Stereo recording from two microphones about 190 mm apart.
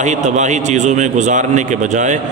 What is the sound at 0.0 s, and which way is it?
A man's voice, 40° right (ahead or behind).